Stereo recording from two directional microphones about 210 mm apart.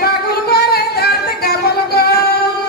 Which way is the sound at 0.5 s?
50° left (ahead or behind).